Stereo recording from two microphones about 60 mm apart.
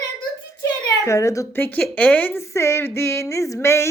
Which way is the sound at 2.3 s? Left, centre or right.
Left.